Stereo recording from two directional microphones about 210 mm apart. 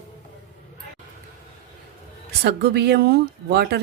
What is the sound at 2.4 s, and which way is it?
A woman's voice, 50° right (ahead or behind).